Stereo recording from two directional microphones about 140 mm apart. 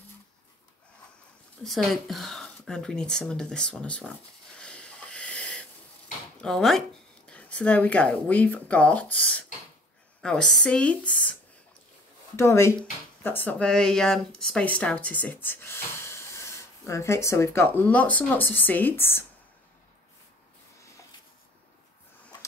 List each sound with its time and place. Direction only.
1.6 s speech: centre (ahead or behind)
4.6 s wheeze: 5° left (ahead or behind)
6.4 s speech: 5° left (ahead or behind)
12.4 s speech: 20° left (ahead or behind)